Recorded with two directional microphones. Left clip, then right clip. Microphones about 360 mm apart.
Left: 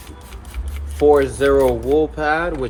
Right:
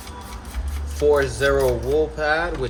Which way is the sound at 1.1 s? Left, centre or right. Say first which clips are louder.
Left 4 dB; centre.